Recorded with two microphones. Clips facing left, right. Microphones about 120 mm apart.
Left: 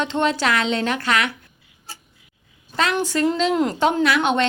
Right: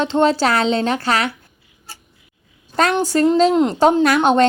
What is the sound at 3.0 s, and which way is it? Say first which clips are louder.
Speech: right 5 dB; 40° right (ahead or behind).